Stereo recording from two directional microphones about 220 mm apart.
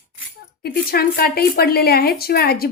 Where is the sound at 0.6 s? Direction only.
45° left (ahead or behind).